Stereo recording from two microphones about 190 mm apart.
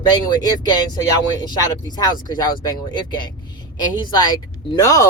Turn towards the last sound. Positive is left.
turn(degrees=20)  # may be behind; listen again after turning